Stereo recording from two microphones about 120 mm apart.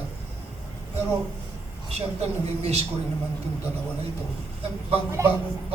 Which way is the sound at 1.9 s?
60° right (ahead or behind).